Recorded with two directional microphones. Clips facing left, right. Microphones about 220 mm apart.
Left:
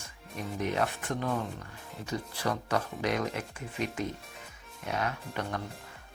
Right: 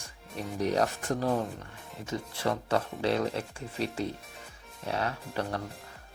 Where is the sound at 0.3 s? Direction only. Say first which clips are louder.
Right 3 dB; 35° right (ahead or behind).